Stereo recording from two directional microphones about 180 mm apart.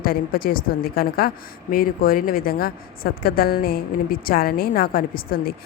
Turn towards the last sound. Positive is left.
turn(degrees=55)  # may be behind; listen again after turning